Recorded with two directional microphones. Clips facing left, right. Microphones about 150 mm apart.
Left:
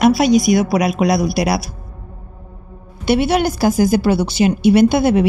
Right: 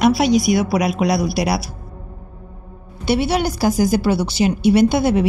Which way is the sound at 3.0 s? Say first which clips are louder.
Left 3 dB; 55° left (ahead or behind).